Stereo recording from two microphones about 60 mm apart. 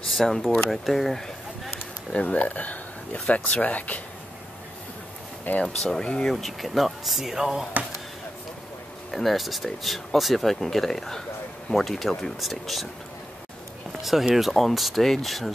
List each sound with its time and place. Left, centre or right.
0.1 s speech: centre
2.1 s speech: left
5.5 s speech: left
5.8 s speech: centre
6.3 s speech: centre
9.1 s speech: centre
14.3 s speech: centre